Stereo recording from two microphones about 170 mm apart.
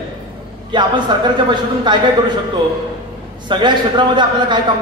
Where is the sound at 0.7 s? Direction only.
25° right (ahead or behind).